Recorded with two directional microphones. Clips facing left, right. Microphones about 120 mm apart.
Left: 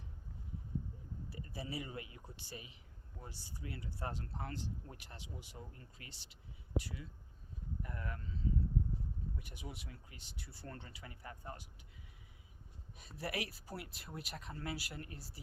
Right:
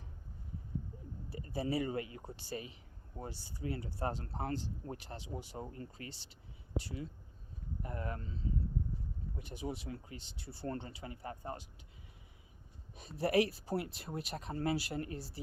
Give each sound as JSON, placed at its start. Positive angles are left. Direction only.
{"t": 1.3, "sound": "speech", "side_deg": -35}
{"t": 13.0, "sound": "speech", "side_deg": -30}